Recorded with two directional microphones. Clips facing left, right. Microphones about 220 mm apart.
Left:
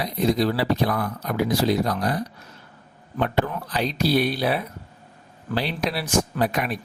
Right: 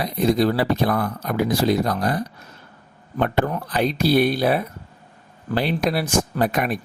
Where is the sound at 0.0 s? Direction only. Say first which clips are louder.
Right 3 dB; 50° right (ahead or behind).